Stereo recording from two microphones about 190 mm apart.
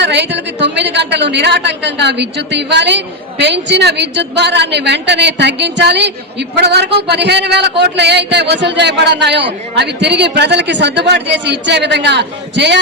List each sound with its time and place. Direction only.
0.0 s speech: 65° right (ahead or behind)